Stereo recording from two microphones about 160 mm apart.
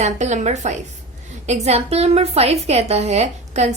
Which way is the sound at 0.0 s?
50° right (ahead or behind).